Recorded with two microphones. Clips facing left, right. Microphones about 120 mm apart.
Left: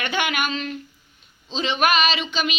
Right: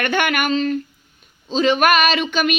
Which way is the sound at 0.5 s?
40° right (ahead or behind).